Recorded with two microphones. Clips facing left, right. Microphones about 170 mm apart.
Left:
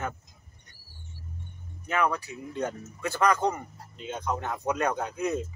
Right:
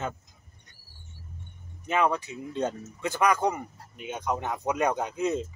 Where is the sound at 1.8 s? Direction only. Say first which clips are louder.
Right 2 dB; 20° right (ahead or behind).